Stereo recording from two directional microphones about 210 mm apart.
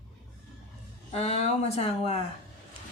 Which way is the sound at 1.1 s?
30° left (ahead or behind).